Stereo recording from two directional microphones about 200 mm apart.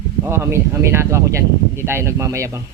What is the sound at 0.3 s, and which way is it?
Speech, 10° right (ahead or behind).